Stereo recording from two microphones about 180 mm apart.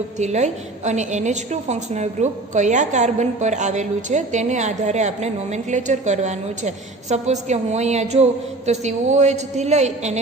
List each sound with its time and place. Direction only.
0.2 s a woman's voice: 40° right (ahead or behind)